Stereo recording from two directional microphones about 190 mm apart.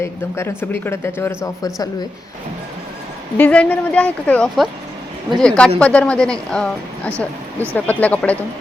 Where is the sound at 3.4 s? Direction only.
10° left (ahead or behind).